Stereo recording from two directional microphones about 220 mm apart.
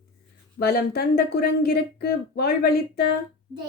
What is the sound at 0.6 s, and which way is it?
Speech, 45° left (ahead or behind).